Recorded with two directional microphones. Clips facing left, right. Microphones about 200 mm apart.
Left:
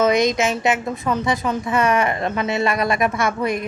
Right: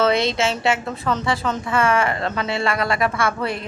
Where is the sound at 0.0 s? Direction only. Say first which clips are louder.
Left 2 dB; 15° left (ahead or behind).